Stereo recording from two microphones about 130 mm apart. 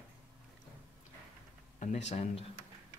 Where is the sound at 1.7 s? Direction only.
65° left (ahead or behind).